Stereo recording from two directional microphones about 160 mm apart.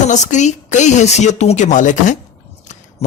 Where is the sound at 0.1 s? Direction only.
50° left (ahead or behind).